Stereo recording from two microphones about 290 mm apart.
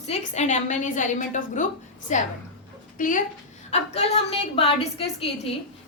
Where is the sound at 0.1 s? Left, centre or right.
Left.